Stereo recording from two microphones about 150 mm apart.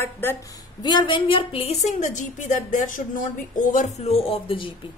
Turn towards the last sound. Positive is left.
turn(degrees=35)  # may be behind; listen again after turning